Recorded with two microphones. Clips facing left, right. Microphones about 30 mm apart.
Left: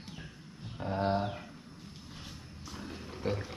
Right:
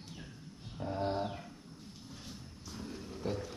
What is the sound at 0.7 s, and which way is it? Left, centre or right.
Speech, left.